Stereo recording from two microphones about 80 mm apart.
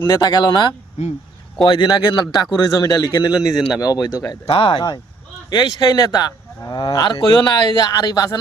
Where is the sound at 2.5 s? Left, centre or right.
Left.